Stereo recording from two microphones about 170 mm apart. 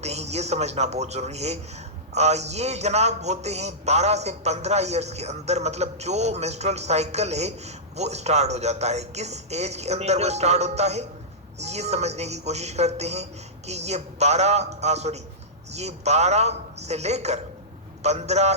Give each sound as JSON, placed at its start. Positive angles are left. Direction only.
{"t": 0.0, "sound": "a man's voice", "side_deg": -40}